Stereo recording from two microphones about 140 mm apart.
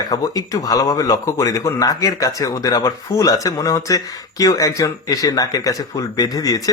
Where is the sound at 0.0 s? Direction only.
25° left (ahead or behind).